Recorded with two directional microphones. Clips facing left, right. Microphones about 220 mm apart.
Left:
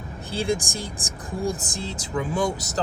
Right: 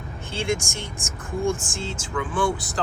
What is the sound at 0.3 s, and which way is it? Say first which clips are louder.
Speech: left 1 dB; 35° left (ahead or behind).